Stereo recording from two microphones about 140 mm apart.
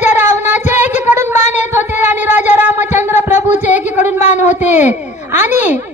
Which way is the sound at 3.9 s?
55° left (ahead or behind).